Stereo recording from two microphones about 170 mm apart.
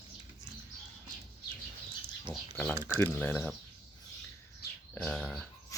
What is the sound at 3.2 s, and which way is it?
Speech, 10° left (ahead or behind).